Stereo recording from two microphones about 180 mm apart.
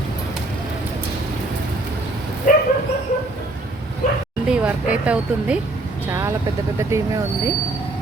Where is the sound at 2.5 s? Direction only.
50° left (ahead or behind).